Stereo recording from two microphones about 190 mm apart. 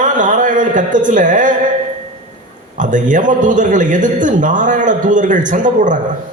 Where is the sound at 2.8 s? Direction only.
40° right (ahead or behind).